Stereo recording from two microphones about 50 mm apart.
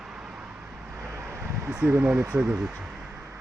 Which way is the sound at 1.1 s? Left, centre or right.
Right.